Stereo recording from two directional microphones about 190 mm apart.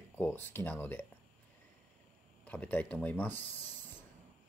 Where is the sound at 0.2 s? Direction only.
10° left (ahead or behind).